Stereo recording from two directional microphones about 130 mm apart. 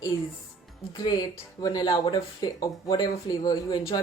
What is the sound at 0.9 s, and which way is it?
Speech, 30° left (ahead or behind).